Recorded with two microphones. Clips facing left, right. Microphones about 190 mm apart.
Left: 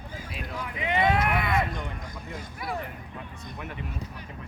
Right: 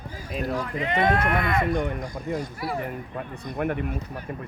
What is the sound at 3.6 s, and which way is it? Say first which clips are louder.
Speech: right 13 dB; 55° right (ahead or behind).